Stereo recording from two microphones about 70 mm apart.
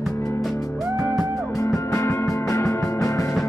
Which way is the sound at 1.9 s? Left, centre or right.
Left.